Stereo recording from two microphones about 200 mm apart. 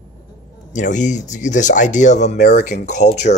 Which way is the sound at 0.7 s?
40° left (ahead or behind).